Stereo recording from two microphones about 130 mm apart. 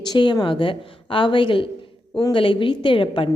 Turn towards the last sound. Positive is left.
turn(degrees=40)  # may be behind; listen again after turning